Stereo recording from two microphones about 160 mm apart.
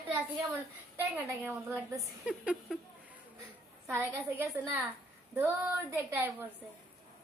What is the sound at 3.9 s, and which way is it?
A woman's voice, 15° right (ahead or behind).